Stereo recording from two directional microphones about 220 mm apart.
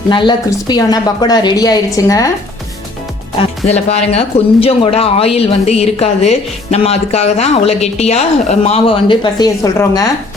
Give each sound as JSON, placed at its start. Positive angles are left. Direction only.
{"t": 0.1, "sound": "speech", "side_deg": 20}
{"t": 3.7, "sound": "speech", "side_deg": 30}